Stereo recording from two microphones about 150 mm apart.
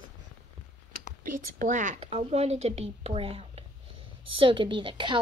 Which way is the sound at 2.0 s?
40° right (ahead or behind).